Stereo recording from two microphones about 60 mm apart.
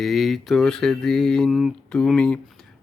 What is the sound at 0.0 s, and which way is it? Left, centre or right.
Music, centre.